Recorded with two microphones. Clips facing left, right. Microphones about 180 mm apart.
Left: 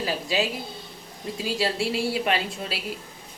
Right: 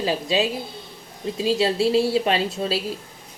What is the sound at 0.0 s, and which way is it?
A woman's voice, 25° right (ahead or behind).